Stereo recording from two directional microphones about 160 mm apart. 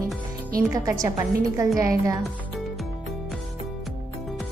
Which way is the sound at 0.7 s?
20° right (ahead or behind).